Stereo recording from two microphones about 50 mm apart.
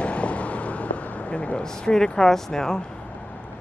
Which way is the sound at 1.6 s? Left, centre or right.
Centre.